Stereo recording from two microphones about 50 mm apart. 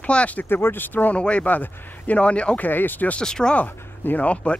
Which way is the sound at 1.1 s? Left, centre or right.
Left.